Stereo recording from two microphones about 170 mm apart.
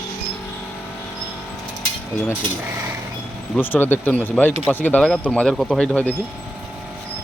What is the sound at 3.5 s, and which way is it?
Speech, 10° left (ahead or behind).